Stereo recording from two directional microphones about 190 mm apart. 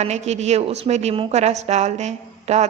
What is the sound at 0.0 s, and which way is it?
A woman's voice, 35° right (ahead or behind).